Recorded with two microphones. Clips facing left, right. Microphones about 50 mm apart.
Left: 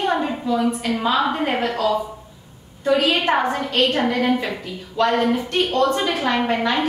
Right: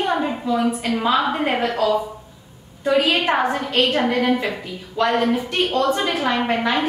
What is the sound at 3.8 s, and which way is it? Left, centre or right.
Speech, right.